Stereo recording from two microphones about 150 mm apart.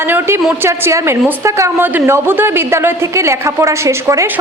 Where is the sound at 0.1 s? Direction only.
15° right (ahead or behind).